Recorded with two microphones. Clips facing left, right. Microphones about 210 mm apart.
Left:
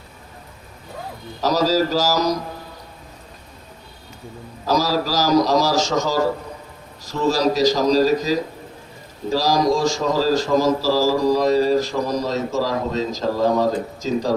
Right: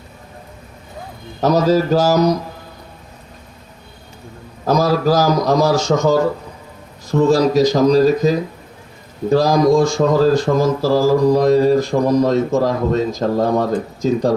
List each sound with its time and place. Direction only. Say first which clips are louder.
1.4 s speech: right 4 dB; 55° right (ahead or behind)
4.6 s speech: right 5 dB; 55° right (ahead or behind)